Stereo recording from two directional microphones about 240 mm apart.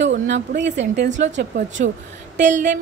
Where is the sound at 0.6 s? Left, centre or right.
Right.